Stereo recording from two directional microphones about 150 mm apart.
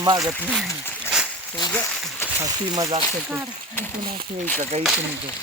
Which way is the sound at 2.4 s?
25° right (ahead or behind).